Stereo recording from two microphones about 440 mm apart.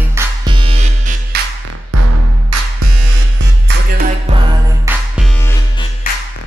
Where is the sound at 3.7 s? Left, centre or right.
Centre.